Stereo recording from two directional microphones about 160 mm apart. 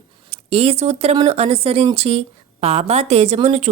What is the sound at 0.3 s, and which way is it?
A woman's voice, 40° right (ahead or behind).